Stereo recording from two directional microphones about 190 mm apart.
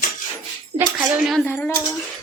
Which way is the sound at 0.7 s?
25° right (ahead or behind).